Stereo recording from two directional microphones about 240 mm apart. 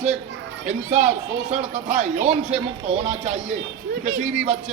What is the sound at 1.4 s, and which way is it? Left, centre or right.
Speech, right.